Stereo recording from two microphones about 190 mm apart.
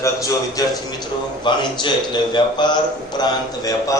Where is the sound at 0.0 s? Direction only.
15° left (ahead or behind).